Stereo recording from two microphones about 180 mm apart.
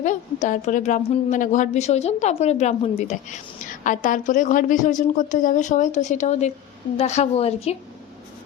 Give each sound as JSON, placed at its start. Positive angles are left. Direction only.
{"t": 0.0, "sound": "a woman's voice", "side_deg": 40}